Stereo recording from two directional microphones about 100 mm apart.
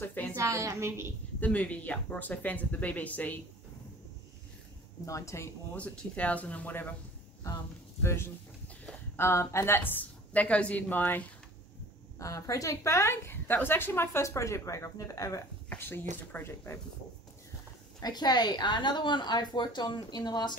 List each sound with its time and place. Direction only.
0.0 s a woman's voice: 15° left (ahead or behind)
0.4 s a woman's voice: 30° right (ahead or behind)
1.4 s speech: 15° left (ahead or behind)
5.0 s a woman's voice: 30° left (ahead or behind)
5.8 s speech: 15° left (ahead or behind)
8.0 s a woman's voice: 25° left (ahead or behind)
12.2 s a woman's voice: 35° left (ahead or behind)
15.7 s a woman's voice: 20° left (ahead or behind)
18.0 s a woman's voice: 45° left (ahead or behind)